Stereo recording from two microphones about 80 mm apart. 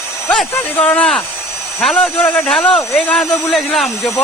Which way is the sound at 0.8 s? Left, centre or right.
Centre.